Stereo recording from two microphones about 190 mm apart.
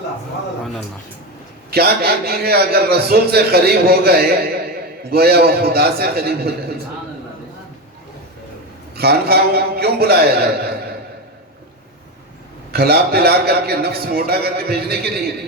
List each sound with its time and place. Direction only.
1.7 s a man's voice: 55° right (ahead or behind)
9.0 s a man's voice: 55° right (ahead or behind)
12.7 s a man's voice: 55° right (ahead or behind)